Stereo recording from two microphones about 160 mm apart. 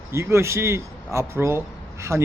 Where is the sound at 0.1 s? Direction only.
15° right (ahead or behind).